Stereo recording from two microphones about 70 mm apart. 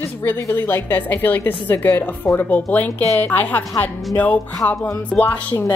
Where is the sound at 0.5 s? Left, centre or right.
Left.